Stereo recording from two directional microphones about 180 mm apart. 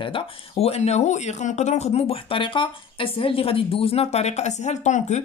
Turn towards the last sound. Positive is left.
turn(degrees=40)  # may be behind; listen again after turning